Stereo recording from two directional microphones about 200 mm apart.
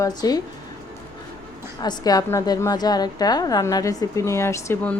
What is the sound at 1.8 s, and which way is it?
A woman's voice, 20° left (ahead or behind).